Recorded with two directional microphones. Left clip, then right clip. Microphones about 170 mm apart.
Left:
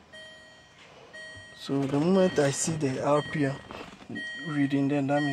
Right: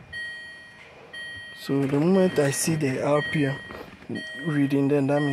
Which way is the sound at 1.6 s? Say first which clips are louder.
Right 4 dB; 15° right (ahead or behind).